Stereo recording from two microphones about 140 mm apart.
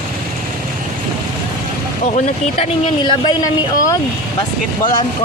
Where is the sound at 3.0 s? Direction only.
30° left (ahead or behind).